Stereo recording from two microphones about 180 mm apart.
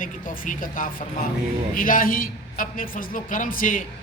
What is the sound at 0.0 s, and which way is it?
A man's voice, 50° left (ahead or behind).